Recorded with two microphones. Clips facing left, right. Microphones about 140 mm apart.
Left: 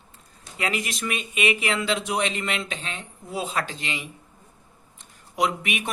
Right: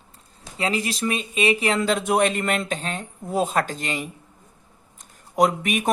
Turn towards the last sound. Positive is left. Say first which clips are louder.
# right 5 dB
turn(degrees=-45)  # may be behind; listen again after turning